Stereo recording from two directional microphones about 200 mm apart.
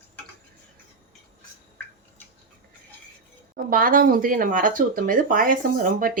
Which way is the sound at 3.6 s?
45° right (ahead or behind).